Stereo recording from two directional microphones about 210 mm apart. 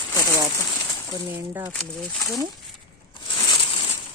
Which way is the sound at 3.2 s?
20° left (ahead or behind).